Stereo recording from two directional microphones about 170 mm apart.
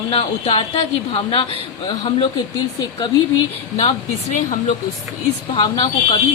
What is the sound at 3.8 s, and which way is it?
Speech, 35° left (ahead or behind).